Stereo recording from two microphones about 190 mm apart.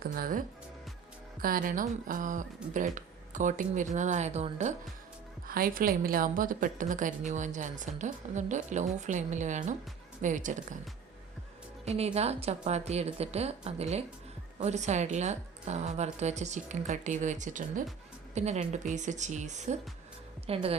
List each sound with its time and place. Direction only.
0.0 s a woman's voice: 50° right (ahead or behind)
5.5 s a woman's voice: 50° right (ahead or behind)
11.9 s a woman's voice: 35° right (ahead or behind)